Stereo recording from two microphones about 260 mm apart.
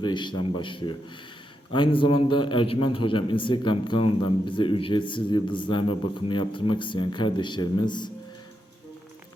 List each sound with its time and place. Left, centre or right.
0.0 s a man's voice: centre